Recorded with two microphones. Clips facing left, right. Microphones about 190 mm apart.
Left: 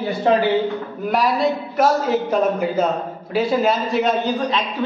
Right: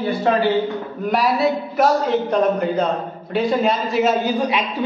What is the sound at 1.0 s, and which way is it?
A man's voice, centre (ahead or behind).